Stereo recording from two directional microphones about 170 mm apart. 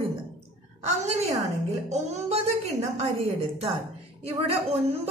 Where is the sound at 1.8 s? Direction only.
40° right (ahead or behind).